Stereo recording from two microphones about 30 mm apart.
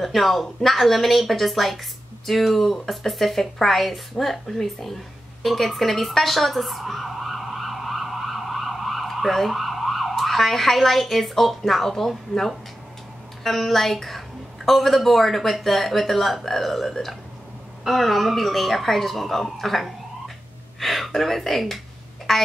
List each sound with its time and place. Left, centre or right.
0.0 s speech: centre
4.6 s a sound: centre
9.3 s a woman's voice: centre